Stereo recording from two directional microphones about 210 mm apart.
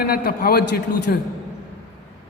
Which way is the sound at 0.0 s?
45° left (ahead or behind).